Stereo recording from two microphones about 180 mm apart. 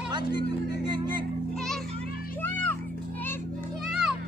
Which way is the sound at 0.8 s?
25° right (ahead or behind).